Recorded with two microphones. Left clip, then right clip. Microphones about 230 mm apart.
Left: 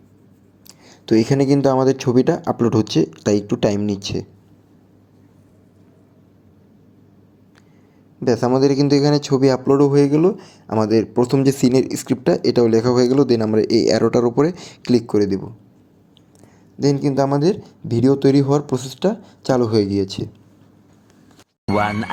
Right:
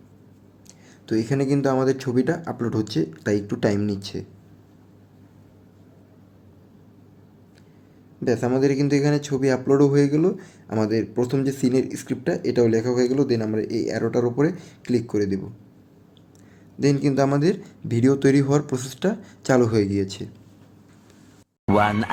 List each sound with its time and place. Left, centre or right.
0.9 s speech: left
8.2 s speech: centre
16.8 s speech: centre
21.7 s a sound: centre